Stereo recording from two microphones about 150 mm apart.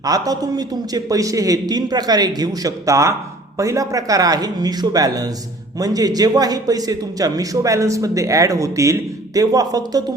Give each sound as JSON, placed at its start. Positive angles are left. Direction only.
{"t": 0.0, "sound": "a man's voice", "side_deg": -25}